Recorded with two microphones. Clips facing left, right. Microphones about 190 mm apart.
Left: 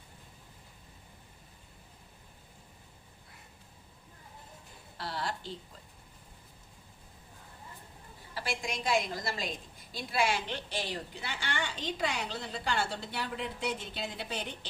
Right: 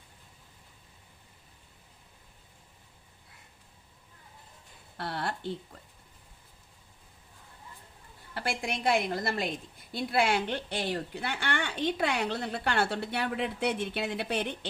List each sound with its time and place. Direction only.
4.9 s speech: 60° right (ahead or behind)
8.4 s a woman's voice: 60° right (ahead or behind)